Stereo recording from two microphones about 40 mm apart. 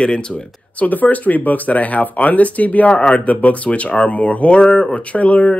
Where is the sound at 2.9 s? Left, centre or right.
Left.